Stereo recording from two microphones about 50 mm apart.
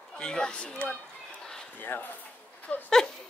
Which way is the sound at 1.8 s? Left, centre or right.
Left.